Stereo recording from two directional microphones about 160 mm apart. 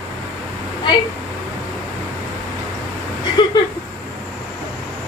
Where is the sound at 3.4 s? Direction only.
30° left (ahead or behind).